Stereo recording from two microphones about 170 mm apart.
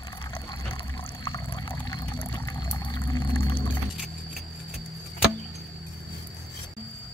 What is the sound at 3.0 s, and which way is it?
Whale vocalization, 20° left (ahead or behind).